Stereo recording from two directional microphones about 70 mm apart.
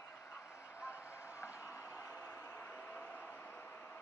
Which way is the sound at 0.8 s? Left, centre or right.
Left.